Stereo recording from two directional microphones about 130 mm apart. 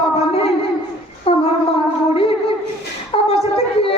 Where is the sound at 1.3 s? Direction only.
50° left (ahead or behind).